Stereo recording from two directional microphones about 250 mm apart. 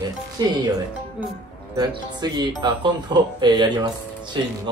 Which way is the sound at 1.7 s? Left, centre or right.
Centre.